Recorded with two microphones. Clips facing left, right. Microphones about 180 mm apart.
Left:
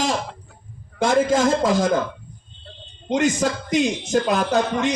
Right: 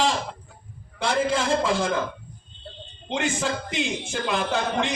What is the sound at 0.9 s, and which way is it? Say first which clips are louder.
Speech: left 6 dB; 45° left (ahead or behind).